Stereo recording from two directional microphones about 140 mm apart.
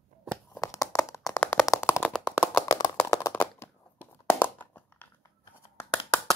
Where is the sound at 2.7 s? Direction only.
25° left (ahead or behind).